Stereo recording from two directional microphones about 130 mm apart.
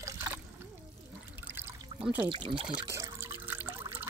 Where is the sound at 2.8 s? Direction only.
25° right (ahead or behind).